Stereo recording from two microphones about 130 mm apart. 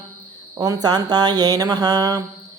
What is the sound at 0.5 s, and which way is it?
Speech, 30° right (ahead or behind).